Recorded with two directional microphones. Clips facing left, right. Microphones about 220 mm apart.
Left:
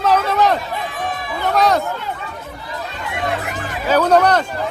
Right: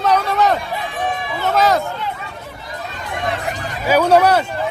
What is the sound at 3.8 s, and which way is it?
Speech, 10° right (ahead or behind).